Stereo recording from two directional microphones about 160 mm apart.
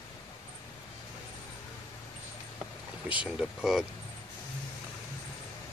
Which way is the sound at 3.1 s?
5° right (ahead or behind).